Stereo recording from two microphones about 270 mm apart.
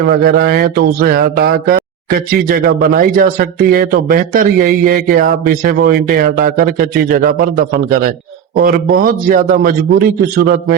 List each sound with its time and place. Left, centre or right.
0.1 s speech: right